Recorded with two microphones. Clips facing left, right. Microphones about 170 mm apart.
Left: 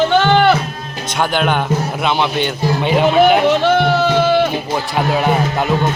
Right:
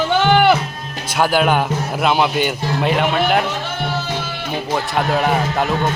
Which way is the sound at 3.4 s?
80° left.